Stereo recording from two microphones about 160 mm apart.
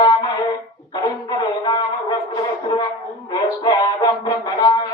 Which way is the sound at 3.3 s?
25° left (ahead or behind).